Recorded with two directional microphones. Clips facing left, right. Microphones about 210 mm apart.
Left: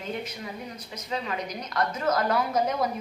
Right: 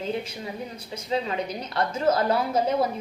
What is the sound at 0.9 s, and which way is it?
A woman's voice, 30° right (ahead or behind).